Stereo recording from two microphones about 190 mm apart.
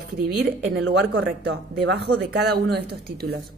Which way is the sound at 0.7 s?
90° right.